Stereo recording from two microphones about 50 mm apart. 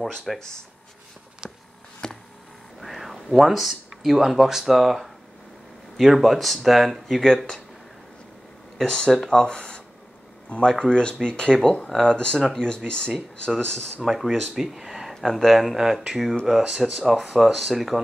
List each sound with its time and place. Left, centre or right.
0.3 s speech: centre
2.0 s a sound: centre
2.8 s speech: centre
8.7 s speech: centre
9.1 s speech: centre
9.4 s speech: centre
12.6 s speech: centre
14.0 s speech: centre